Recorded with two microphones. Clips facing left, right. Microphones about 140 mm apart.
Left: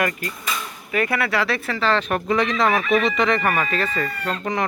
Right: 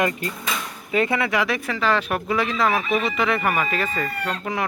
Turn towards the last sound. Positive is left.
turn(degrees=-5)  # may be behind; listen again after turning